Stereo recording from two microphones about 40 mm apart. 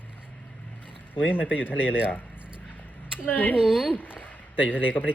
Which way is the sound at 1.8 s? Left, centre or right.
Right.